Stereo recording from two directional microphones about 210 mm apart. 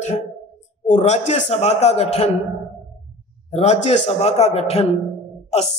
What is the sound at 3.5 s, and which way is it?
A man's voice, 30° left (ahead or behind).